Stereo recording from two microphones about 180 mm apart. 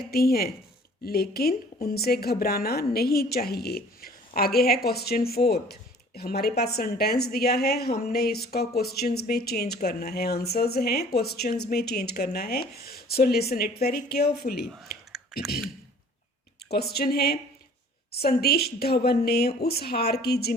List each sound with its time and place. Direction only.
0.1 s a woman's voice: 60° left (ahead or behind)
15.1 s a sound: centre (ahead or behind)
16.6 s a woman's voice: 60° left (ahead or behind)